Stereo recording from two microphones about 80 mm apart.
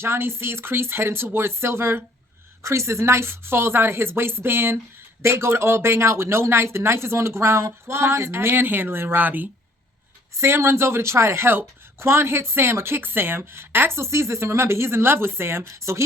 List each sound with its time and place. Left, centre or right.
0.0 s speech: right
10.3 s speech: right